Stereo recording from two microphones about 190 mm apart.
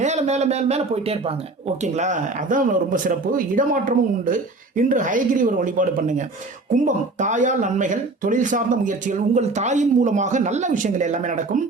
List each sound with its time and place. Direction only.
0.0 s speech: 35° right (ahead or behind)